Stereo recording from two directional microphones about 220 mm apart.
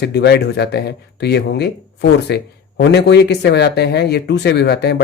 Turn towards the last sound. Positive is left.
turn(degrees=50)  # may be behind; listen again after turning